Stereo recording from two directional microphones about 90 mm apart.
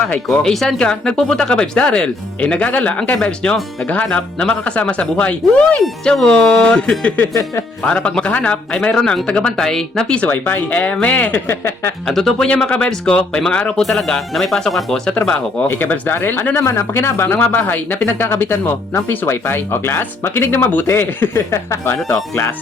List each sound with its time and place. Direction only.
0.0 s speech: 10° left (ahead or behind)
11.4 s speech: 30° left (ahead or behind)
12.0 s speech: 5° left (ahead or behind)
15.2 s speech: 20° left (ahead or behind)